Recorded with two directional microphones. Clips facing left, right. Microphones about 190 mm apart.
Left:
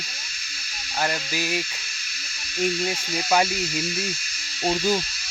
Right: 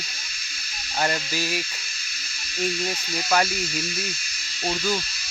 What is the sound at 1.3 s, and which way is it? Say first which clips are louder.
Speech: left 1 dB; 15° left (ahead or behind).